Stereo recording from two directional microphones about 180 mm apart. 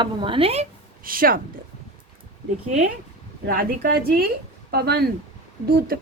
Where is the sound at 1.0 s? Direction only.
50° right (ahead or behind).